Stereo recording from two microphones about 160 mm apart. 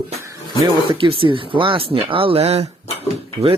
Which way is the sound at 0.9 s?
35° right (ahead or behind).